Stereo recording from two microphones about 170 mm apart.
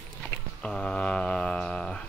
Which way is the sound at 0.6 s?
5° left (ahead or behind).